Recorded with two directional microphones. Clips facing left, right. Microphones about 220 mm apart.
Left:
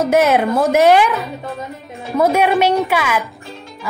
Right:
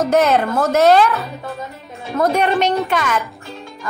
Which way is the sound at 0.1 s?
10° left (ahead or behind).